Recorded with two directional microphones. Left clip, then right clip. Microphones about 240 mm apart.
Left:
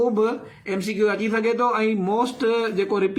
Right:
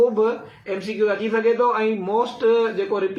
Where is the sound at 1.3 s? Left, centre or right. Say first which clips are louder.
Right 2 dB; left.